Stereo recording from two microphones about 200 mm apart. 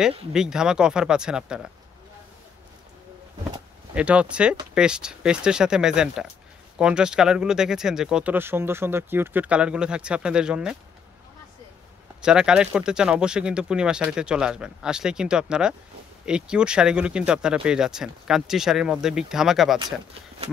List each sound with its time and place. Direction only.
0.3 s speech: 5° right (ahead or behind)
3.9 s speech: 5° right (ahead or behind)
12.2 s speech: 5° right (ahead or behind)